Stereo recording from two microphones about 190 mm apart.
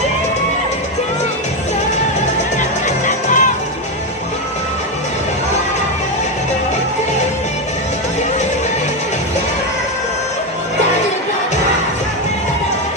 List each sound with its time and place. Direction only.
3.1 s music: 40° left (ahead or behind)